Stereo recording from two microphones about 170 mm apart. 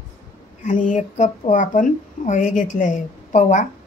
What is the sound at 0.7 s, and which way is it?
Speech, 50° left (ahead or behind).